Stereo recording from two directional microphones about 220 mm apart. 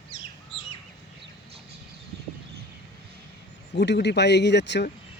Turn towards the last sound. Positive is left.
turn(degrees=50)  # may be behind; listen again after turning